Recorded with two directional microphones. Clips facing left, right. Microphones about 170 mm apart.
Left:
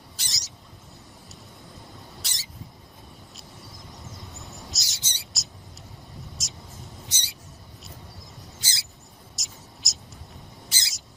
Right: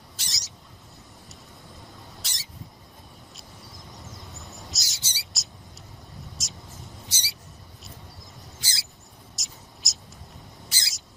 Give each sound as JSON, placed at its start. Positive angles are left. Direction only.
{"t": 0.2, "sound": "bird", "side_deg": 0}
{"t": 2.2, "sound": "rodents", "side_deg": 0}
{"t": 3.9, "sound": "owl", "side_deg": 0}
{"t": 6.4, "sound": "mouse", "side_deg": 0}
{"t": 8.6, "sound": "rodents", "side_deg": 20}
{"t": 9.3, "sound": "a sound", "side_deg": 0}
{"t": 10.7, "sound": "bird", "side_deg": 20}